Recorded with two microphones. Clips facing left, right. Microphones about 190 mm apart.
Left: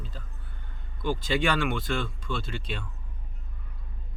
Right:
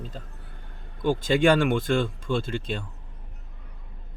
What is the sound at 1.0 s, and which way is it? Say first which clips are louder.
Speech: right 7 dB; 45° right (ahead or behind).